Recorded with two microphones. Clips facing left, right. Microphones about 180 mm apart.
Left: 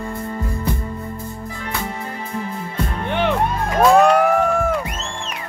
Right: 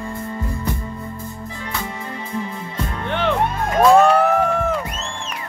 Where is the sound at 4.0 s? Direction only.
10° left (ahead or behind).